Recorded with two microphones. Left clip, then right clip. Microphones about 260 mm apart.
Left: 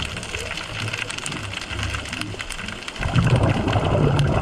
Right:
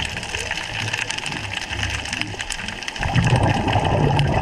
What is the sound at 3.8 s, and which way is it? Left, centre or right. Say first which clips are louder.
Water: right 2 dB; centre.